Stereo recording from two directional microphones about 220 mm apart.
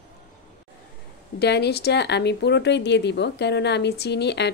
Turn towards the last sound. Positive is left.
turn(degrees=50)  # may be behind; listen again after turning